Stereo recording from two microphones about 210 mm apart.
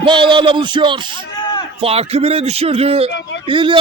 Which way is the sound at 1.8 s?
30° right (ahead or behind).